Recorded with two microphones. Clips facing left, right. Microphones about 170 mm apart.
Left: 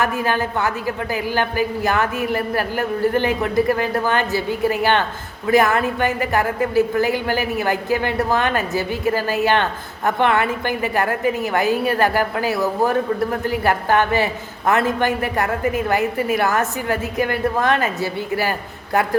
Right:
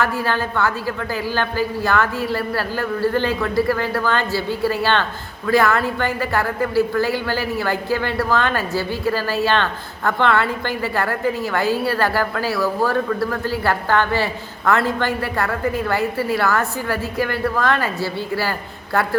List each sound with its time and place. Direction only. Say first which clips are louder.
0.0 s a woman's voice: left 1 dB; 20° left (ahead or behind)